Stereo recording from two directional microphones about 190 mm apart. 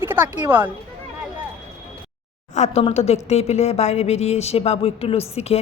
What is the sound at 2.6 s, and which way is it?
A woman's voice, 35° left (ahead or behind).